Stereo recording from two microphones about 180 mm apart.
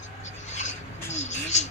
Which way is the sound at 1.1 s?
40° left (ahead or behind).